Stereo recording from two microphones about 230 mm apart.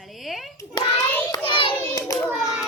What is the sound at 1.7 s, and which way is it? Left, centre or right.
Hands, centre.